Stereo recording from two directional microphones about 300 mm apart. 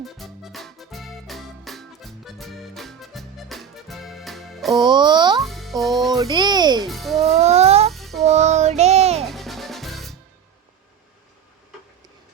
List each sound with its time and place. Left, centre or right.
0.0 s music: centre
4.8 s a child's voice: centre
5.4 s music: centre
6.1 s a sound: centre
6.8 s music: centre
7.3 s cat: right
7.9 s music: centre
8.2 s child singing: right
9.2 s music: centre